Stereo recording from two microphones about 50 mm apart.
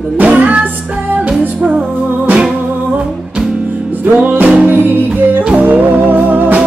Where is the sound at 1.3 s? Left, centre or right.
Centre.